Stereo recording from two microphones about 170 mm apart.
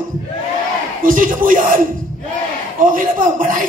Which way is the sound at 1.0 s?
55° right (ahead or behind).